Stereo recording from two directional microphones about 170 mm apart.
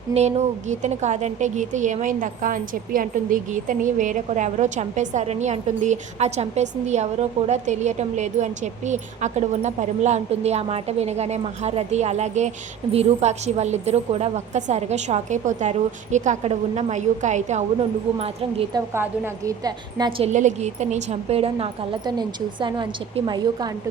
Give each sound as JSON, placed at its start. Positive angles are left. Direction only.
{"t": 0.1, "sound": "a woman's voice", "side_deg": -40}
{"t": 18.7, "sound": "a woman's voice", "side_deg": -15}
{"t": 20.3, "sound": "a woman's voice", "side_deg": -45}